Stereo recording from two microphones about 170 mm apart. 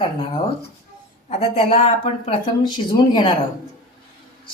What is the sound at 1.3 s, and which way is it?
A woman's voice, 35° left (ahead or behind).